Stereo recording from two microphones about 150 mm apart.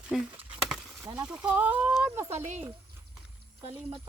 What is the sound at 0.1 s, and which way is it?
Speech, centre (ahead or behind).